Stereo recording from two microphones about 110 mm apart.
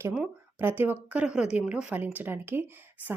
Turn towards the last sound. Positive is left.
turn(degrees=-20)  # may be behind; listen again after turning